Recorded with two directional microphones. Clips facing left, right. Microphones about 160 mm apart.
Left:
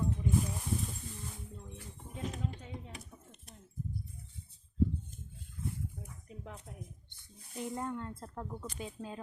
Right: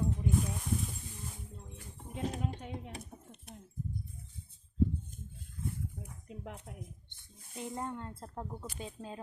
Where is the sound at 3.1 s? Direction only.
60° right (ahead or behind).